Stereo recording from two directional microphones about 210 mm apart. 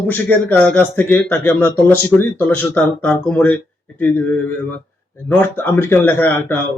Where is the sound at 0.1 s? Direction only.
10° left (ahead or behind).